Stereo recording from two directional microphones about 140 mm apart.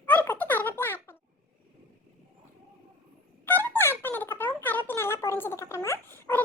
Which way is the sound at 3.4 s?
15° left (ahead or behind).